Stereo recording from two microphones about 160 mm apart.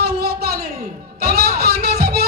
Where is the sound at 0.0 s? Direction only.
80° right.